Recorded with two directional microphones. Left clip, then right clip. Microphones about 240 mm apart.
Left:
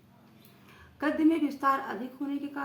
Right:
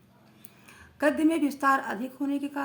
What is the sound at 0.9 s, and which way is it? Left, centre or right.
A woman's voice, right.